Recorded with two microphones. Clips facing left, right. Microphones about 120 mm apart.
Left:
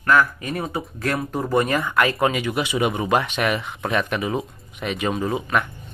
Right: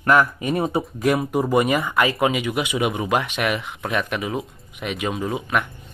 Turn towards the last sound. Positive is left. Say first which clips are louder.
# left 1 dB
turn(degrees=-5)  # may be behind; listen again after turning